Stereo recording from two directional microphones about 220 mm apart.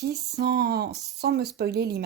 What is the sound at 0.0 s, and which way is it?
Speech, 45° right (ahead or behind).